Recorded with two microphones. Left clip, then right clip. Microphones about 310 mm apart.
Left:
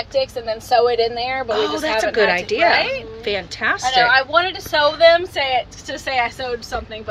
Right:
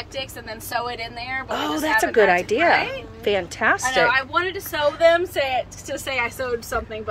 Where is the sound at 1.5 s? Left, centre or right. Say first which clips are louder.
Even; centre.